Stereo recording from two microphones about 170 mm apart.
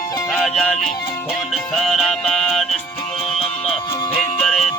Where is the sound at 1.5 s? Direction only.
Centre (ahead or behind).